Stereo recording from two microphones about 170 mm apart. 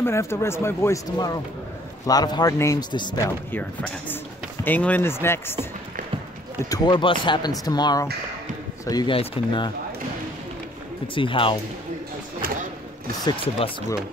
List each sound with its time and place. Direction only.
0.0 s speech: 15° left (ahead or behind)
4.6 s speech: 10° left (ahead or behind)
6.7 s speech: 25° left (ahead or behind)
11.1 s speech: 30° left (ahead or behind)
13.2 s speech: 30° left (ahead or behind)